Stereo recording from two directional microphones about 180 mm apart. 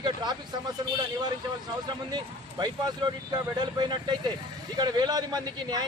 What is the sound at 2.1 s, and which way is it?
A man's voice, 25° right (ahead or behind).